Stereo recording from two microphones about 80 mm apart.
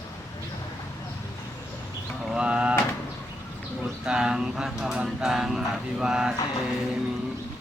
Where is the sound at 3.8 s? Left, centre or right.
Centre.